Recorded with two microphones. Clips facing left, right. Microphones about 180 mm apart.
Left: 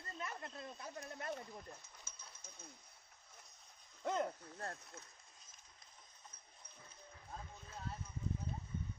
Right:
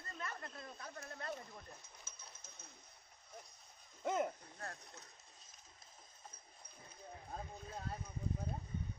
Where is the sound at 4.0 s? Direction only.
10° right (ahead or behind).